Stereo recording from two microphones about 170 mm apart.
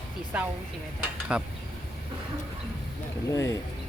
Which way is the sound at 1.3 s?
5° right (ahead or behind).